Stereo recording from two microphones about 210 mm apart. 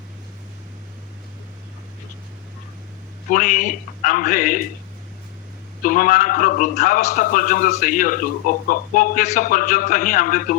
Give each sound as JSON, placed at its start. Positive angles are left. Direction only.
{"t": 3.2, "sound": "a man's voice", "side_deg": 40}
{"t": 5.8, "sound": "a man's voice", "side_deg": 40}